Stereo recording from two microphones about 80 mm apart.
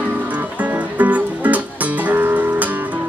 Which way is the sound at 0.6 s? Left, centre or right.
Centre.